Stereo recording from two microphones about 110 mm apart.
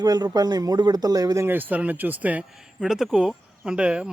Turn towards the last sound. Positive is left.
turn(degrees=-10)  # may be behind; listen again after turning